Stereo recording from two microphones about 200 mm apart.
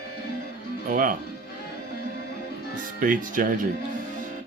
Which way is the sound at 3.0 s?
45° right (ahead or behind).